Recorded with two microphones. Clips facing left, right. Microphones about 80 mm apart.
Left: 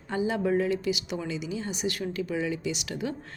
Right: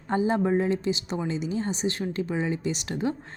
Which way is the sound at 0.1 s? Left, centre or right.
Right.